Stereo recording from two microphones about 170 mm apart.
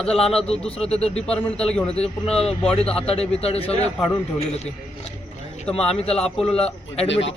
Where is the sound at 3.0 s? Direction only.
35° left (ahead or behind).